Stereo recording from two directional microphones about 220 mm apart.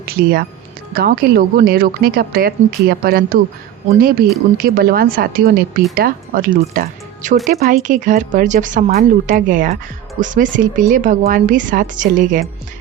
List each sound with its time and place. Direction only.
0.0 s a woman's voice: 45° right (ahead or behind)